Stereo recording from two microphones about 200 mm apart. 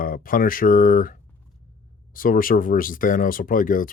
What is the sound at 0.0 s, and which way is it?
Speech, 45° left (ahead or behind).